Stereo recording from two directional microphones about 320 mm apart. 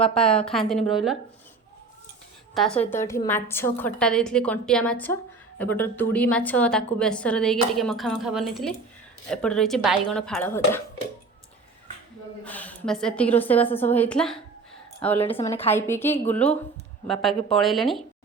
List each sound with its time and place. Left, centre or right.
0.1 s a woman's voice: centre
2.6 s a woman's voice: centre
12.5 s a woman's voice: centre
15.2 s a woman's voice: centre
15.7 s a woman's voice: centre